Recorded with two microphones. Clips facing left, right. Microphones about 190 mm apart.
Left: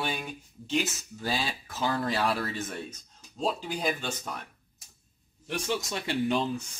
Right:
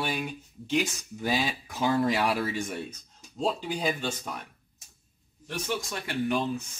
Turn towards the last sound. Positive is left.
turn(degrees=25)  # may be behind; listen again after turning